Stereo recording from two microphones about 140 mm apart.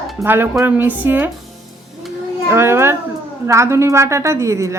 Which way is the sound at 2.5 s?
15° right (ahead or behind).